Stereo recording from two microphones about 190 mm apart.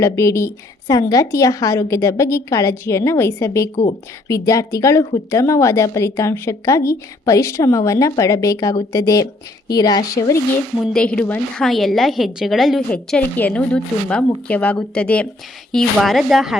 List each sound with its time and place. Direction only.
0.0 s a woman's voice: 15° left (ahead or behind)
10.9 s a woman's voice: 5° left (ahead or behind)